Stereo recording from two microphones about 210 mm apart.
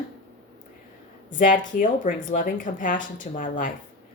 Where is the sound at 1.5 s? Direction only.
40° left (ahead or behind).